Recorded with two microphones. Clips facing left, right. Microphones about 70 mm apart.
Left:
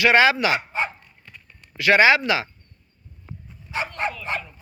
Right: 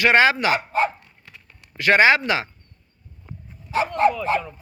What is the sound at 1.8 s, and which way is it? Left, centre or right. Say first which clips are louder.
Speech: even; right.